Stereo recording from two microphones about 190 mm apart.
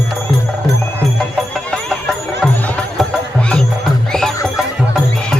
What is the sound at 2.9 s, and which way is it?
Music, 5° left (ahead or behind).